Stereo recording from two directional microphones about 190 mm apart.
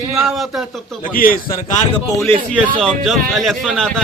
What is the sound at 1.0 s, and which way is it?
Speech, 50° left (ahead or behind).